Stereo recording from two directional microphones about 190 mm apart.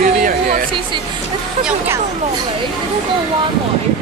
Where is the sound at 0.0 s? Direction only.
45° right (ahead or behind).